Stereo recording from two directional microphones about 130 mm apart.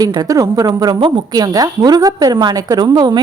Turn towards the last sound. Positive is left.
turn(degrees=-35)  # may be behind; listen again after turning